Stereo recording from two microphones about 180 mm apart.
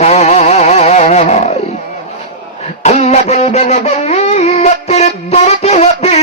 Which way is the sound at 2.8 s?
40° left (ahead or behind).